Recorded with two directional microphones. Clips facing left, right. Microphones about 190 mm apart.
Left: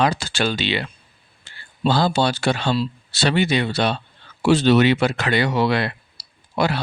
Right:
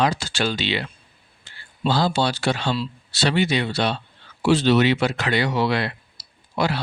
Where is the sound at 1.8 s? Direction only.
55° left (ahead or behind).